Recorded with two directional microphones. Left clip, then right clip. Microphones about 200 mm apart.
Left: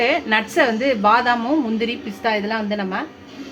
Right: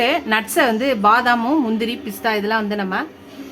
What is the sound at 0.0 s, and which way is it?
A woman's voice, 15° right (ahead or behind).